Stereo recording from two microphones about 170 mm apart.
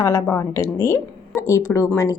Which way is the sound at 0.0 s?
15° left (ahead or behind).